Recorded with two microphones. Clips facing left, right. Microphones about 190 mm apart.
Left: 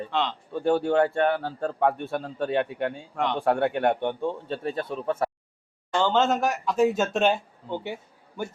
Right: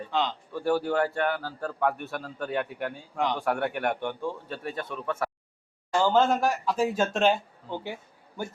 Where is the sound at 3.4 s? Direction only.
25° left (ahead or behind).